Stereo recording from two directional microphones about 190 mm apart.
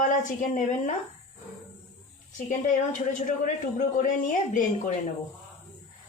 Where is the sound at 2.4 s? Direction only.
40° left (ahead or behind).